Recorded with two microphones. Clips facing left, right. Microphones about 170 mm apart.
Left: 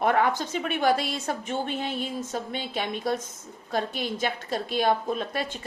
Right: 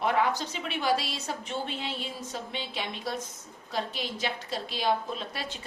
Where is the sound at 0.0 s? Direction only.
50° left (ahead or behind).